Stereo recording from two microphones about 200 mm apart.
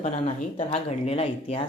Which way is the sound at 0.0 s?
35° left (ahead or behind).